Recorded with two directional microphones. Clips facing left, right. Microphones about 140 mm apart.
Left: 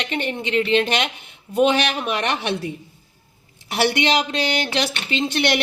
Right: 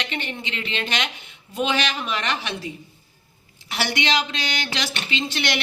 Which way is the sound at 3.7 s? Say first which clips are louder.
Left 5 dB; 55° left (ahead or behind).